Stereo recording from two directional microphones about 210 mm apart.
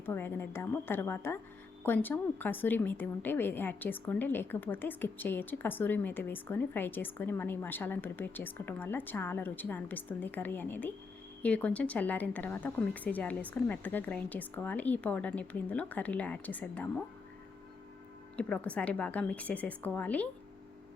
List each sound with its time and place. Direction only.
0.0 s a woman's voice: 10° left (ahead or behind)
18.3 s a woman's voice: 5° left (ahead or behind)